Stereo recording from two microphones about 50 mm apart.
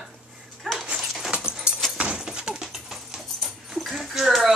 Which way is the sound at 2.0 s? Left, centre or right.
Centre.